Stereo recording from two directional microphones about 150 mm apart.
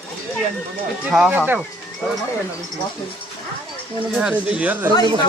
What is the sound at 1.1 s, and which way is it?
Speech, 10° right (ahead or behind).